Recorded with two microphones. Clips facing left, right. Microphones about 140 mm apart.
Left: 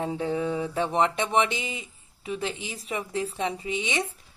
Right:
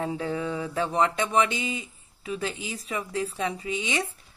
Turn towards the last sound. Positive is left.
turn(degrees=25)  # may be behind; listen again after turning